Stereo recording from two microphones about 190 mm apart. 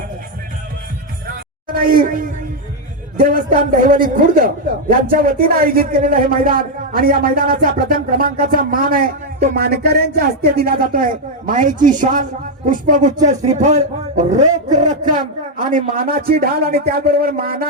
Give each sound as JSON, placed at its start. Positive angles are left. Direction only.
{"t": 1.6, "sound": "a woman's voice", "side_deg": -50}